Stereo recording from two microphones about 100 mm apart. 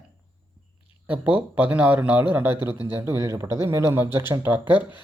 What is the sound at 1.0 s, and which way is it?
Speech, 15° right (ahead or behind).